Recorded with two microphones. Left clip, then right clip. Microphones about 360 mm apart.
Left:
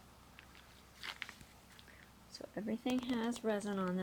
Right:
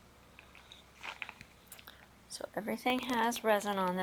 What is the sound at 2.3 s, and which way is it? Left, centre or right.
Speech, right.